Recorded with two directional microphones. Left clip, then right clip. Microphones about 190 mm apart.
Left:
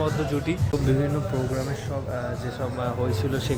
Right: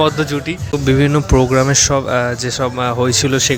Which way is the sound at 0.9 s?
25° right (ahead or behind).